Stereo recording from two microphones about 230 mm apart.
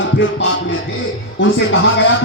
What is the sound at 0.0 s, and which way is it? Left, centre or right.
Music, left.